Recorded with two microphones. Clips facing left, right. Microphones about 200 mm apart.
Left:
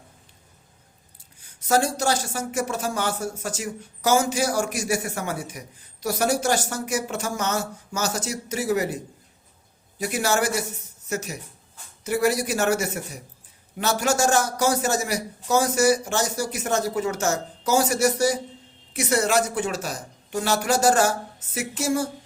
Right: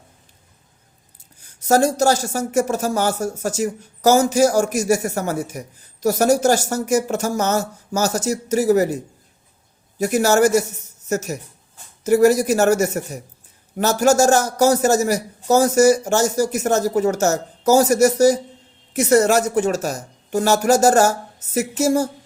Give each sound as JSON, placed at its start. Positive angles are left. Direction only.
{"t": 1.4, "sound": "speech", "side_deg": -40}
{"t": 10.0, "sound": "a woman's voice", "side_deg": -40}